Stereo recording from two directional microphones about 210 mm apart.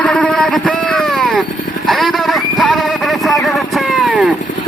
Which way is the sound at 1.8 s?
Centre (ahead or behind).